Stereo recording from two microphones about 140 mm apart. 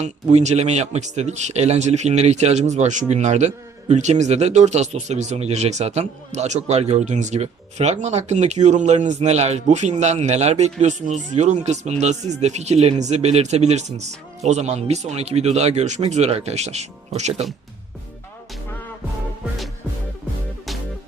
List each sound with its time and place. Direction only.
0.0 s a man's voice: 55° right (ahead or behind)